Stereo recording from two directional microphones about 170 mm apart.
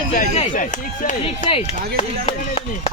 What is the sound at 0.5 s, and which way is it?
Speech, 50° left (ahead or behind).